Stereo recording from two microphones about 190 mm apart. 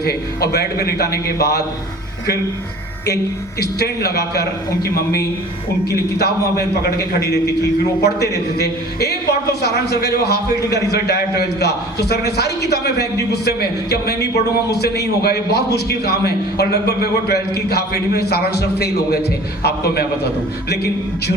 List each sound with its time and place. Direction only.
0.0 s speech: 55° left (ahead or behind)
3.6 s speech: 60° left (ahead or behind)